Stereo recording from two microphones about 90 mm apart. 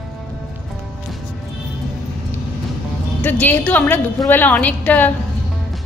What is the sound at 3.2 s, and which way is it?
A woman's voice, 20° left (ahead or behind).